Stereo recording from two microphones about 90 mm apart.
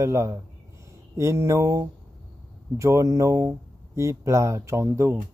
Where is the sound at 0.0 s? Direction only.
30° right (ahead or behind).